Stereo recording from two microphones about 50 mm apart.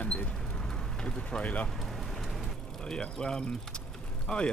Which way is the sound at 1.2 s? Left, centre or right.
Left.